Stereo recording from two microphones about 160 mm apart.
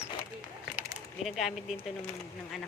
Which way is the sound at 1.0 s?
Centre (ahead or behind).